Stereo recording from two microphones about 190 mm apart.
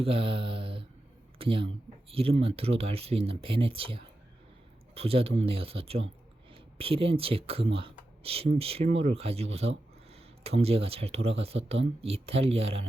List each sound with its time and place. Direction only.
0.0 s mantra: 30° right (ahead or behind)
1.4 s speech: 30° right (ahead or behind)